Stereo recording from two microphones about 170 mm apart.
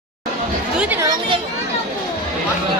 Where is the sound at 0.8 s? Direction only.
10° right (ahead or behind).